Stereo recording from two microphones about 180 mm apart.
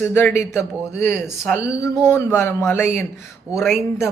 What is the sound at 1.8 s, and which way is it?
Speech, 15° left (ahead or behind).